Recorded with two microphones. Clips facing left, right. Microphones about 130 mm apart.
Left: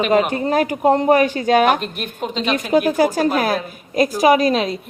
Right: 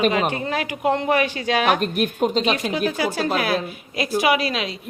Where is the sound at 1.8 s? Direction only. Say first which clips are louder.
Right 5 dB; 45° right (ahead or behind).